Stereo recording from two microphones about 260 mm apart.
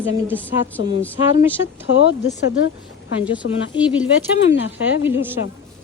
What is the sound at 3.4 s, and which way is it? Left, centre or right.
Speech, left.